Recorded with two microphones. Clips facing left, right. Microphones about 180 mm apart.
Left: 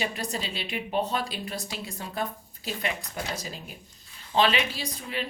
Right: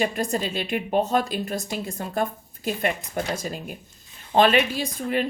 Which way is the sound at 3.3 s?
50° right (ahead or behind).